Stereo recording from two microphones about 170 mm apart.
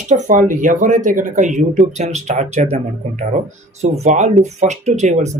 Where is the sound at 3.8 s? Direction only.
45° right (ahead or behind).